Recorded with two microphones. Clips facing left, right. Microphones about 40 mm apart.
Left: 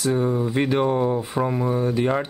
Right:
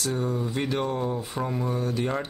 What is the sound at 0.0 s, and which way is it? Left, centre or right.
Speech, centre.